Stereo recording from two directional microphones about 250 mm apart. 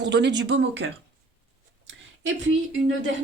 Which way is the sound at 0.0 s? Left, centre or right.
Right.